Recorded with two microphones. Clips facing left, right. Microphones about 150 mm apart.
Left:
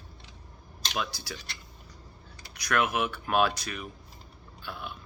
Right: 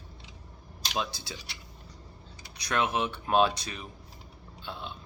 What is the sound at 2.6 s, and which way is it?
Speech, 30° right (ahead or behind).